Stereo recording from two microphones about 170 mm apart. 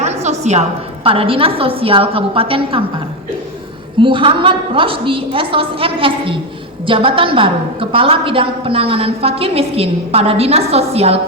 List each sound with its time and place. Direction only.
0.0 s a sound: 40° right (ahead or behind)
1.0 s a woman's voice: 30° right (ahead or behind)
4.0 s a woman's voice: 30° right (ahead or behind)